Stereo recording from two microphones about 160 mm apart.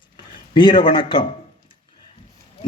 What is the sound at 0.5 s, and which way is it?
Speech, 30° left (ahead or behind).